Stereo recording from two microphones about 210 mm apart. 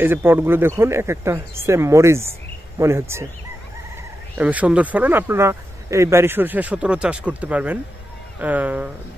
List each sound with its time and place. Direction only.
0.0 s speech: 10° right (ahead or behind)
4.4 s speech: 5° right (ahead or behind)